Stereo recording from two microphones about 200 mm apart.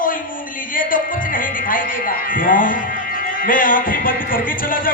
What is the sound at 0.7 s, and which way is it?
Music, 45° left (ahead or behind).